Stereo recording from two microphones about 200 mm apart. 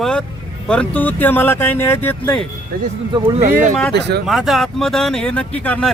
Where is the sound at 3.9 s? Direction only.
55° right (ahead or behind).